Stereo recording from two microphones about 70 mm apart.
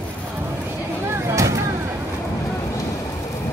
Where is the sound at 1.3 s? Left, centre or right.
Right.